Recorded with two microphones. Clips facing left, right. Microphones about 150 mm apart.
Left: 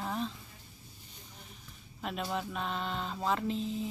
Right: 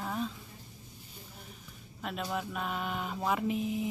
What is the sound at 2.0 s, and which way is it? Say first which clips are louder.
Speech: even; centre (ahead or behind).